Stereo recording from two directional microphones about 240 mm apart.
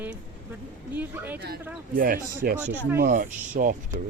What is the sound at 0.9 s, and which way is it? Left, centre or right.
Speech, centre.